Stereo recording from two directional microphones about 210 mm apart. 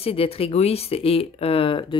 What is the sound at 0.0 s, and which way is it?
Speech, 25° left (ahead or behind).